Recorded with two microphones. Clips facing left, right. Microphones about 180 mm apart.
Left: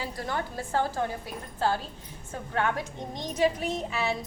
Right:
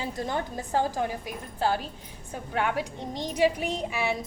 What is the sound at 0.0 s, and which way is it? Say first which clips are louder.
A woman's voice: right 2 dB; 20° right (ahead or behind).